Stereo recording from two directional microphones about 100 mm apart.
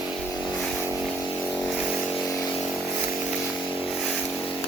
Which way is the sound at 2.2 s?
35° left (ahead or behind).